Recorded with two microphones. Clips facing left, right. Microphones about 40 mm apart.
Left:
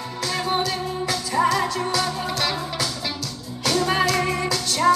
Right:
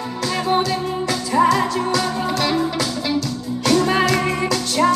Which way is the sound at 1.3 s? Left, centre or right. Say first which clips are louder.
Right 5 dB; centre.